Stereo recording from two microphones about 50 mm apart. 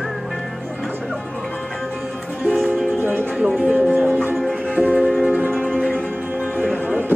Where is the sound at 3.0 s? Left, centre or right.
Right.